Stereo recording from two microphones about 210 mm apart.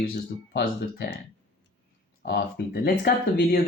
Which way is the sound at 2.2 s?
50° left (ahead or behind).